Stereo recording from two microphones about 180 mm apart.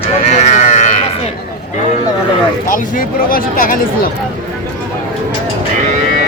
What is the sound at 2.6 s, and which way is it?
Speech, 50° left (ahead or behind).